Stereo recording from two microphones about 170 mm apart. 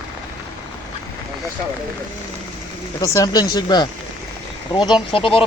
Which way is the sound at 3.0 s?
20° left (ahead or behind).